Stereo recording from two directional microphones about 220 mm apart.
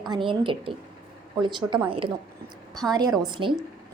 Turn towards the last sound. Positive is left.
turn(degrees=-20)  # may be behind; listen again after turning